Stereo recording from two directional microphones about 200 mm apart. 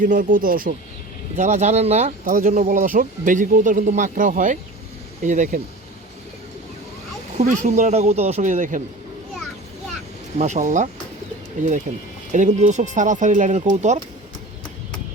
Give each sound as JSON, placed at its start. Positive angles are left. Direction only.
{"t": 0.0, "sound": "speech", "side_deg": -45}
{"t": 7.3, "sound": "speech", "side_deg": -35}
{"t": 10.3, "sound": "speech", "side_deg": -35}
{"t": 11.9, "sound": "speech", "side_deg": -35}